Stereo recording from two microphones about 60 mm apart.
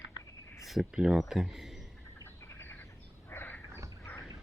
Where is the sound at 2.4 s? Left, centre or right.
Left.